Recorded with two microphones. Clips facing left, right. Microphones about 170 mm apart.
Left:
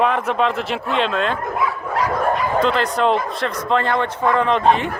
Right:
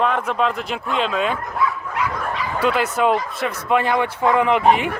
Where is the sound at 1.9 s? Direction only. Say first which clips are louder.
Left 7 dB; 45° left (ahead or behind).